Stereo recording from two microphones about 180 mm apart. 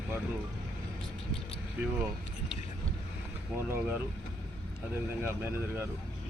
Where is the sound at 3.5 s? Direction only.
15° right (ahead or behind).